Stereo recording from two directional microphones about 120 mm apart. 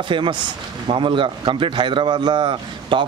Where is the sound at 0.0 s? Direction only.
40° right (ahead or behind).